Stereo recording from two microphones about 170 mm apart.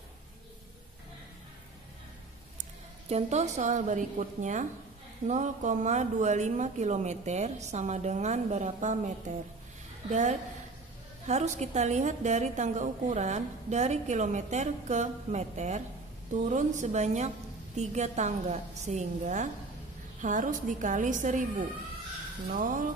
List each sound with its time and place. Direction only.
3.1 s a woman's voice: 40° right (ahead or behind)
11.2 s a woman's voice: 40° right (ahead or behind)